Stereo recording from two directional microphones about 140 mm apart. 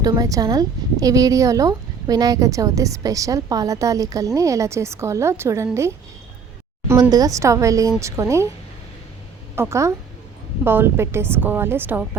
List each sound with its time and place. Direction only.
0.0 s a woman's voice: 25° right (ahead or behind)
7.1 s a woman's voice: 25° right (ahead or behind)
9.6 s a woman's voice: 20° right (ahead or behind)